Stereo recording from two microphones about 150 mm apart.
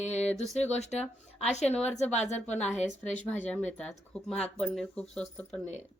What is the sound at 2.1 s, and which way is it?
Speech, 50° left (ahead or behind).